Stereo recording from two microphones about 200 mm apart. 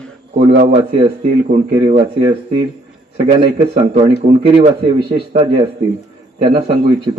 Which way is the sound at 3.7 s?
30° right (ahead or behind).